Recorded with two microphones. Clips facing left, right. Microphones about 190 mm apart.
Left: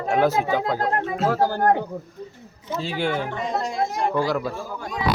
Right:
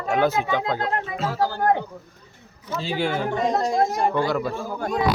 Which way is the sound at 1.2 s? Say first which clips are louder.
Left 3 dB; 50° left (ahead or behind).